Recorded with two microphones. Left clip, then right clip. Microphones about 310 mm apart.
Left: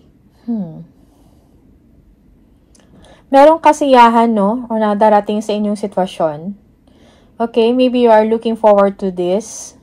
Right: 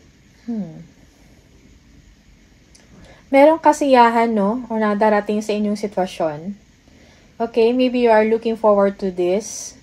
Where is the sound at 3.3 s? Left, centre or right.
Centre.